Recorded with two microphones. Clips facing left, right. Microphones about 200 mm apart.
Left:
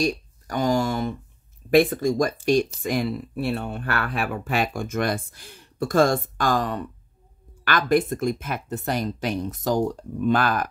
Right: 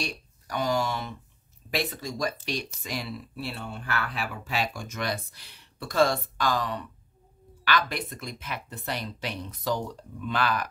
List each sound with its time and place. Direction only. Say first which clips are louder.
0.0 s speech: left 11 dB; 45° left (ahead or behind)